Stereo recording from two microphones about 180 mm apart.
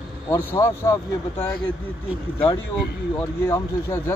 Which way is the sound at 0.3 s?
15° left (ahead or behind).